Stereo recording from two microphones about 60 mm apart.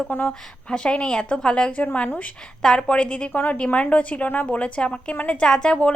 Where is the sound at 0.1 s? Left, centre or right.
Left.